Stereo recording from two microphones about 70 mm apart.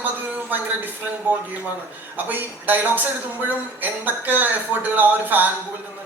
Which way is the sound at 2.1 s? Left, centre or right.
Right.